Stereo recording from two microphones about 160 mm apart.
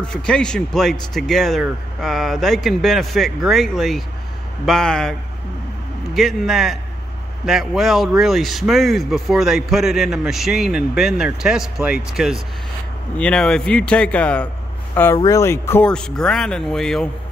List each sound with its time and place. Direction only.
0.0 s a man's voice: 5° left (ahead or behind)
6.1 s a man's voice: centre (ahead or behind)
15.1 s a man's voice: 20° left (ahead or behind); by 17.1 s 5° left (ahead or behind)